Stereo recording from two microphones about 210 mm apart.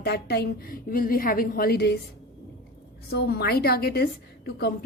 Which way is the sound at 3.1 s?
50° left (ahead or behind).